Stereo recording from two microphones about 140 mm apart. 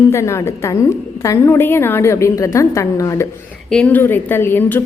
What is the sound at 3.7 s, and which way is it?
Speech, 10° left (ahead or behind).